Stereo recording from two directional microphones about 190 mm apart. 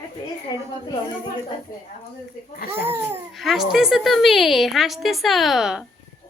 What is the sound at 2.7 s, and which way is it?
Speech, 10° right (ahead or behind).